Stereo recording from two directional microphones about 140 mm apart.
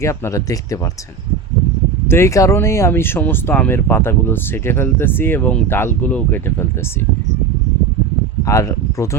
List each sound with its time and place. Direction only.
0.0 s speech: 20° left (ahead or behind)
2.0 s speech: 20° left (ahead or behind)
8.4 s speech: 20° left (ahead or behind)